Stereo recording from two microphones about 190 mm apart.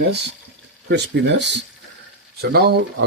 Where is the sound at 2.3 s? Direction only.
55° right (ahead or behind).